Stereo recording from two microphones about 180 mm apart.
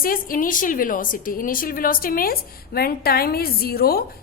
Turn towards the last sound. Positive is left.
turn(degrees=55)  # may be behind; listen again after turning